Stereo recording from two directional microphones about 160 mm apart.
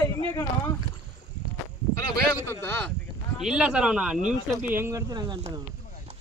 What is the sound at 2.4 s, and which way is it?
Speech, 15° left (ahead or behind).